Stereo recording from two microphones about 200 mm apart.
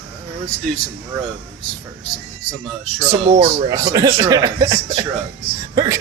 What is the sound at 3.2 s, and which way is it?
Speech, 25° right (ahead or behind).